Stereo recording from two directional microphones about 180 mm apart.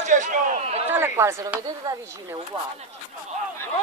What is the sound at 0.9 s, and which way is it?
Speech, 15° right (ahead or behind).